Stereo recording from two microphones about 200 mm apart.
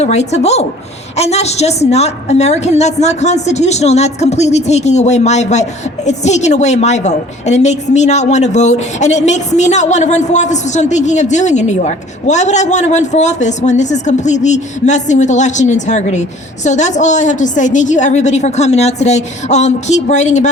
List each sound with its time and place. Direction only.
0.0 s a woman's voice: 35° left (ahead or behind)